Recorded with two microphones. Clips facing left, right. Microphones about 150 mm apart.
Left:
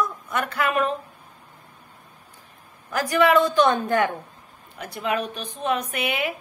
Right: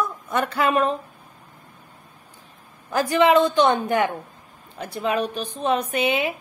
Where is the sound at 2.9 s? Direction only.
25° right (ahead or behind).